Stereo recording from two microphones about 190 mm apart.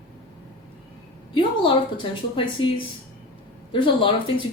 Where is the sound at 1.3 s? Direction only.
25° left (ahead or behind).